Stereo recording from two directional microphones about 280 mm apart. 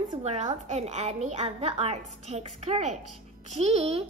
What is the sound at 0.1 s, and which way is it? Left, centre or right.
A woman's voice, right.